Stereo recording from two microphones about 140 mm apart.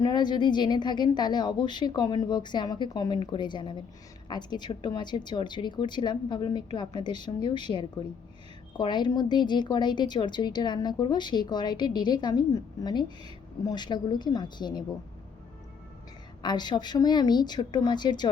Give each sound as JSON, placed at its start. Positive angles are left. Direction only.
{"t": 0.0, "sound": "a woman's voice", "side_deg": 30}
{"t": 16.4, "sound": "a woman's voice", "side_deg": 30}